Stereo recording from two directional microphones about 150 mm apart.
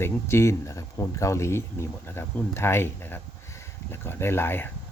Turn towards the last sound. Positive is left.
turn(degrees=15)  # may be behind; listen again after turning